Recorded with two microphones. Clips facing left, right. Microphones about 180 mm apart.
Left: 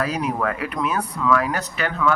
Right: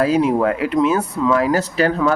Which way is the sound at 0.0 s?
25° right (ahead or behind).